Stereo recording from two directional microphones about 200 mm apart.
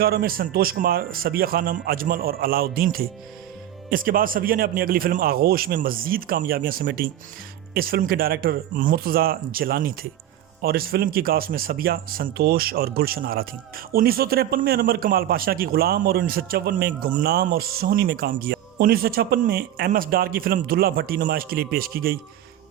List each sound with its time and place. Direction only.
0.0 s speech: 50° right (ahead or behind)